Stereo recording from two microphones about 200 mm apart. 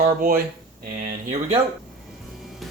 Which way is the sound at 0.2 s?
45° right (ahead or behind).